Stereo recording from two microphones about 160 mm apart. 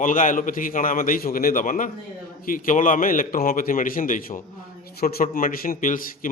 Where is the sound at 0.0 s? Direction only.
55° left (ahead or behind).